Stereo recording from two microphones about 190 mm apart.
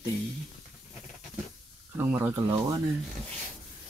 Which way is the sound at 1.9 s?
10° right (ahead or behind).